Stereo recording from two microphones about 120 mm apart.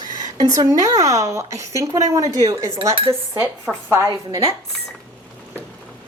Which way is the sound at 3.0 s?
20° right (ahead or behind).